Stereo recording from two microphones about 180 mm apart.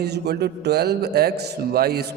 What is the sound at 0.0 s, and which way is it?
A man's voice, 65° right (ahead or behind).